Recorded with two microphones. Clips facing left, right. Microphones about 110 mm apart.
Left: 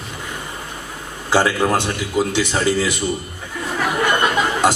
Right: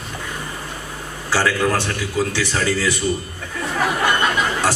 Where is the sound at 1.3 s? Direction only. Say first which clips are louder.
Left 2 dB; 20° left (ahead or behind).